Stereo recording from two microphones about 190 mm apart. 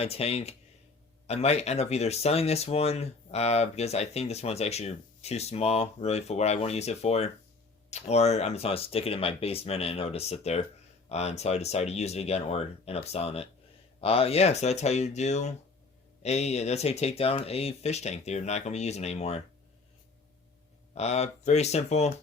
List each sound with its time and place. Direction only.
0.0 s speech: 30° left (ahead or behind)
20.9 s speech: 35° left (ahead or behind)